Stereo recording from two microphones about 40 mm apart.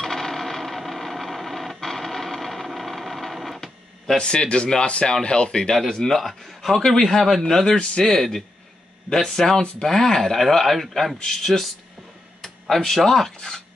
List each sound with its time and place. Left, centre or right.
0.0 s a sound: centre
4.2 s speech: left
6.1 s speech: centre
7.6 s speech: centre
8.1 s speech: centre
12.6 s speech: centre